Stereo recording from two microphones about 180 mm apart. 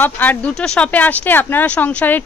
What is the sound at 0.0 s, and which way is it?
Speech, 10° left (ahead or behind).